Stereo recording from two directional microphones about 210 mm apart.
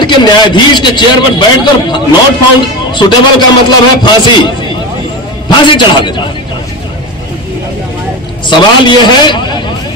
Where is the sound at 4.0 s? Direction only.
20° left (ahead or behind).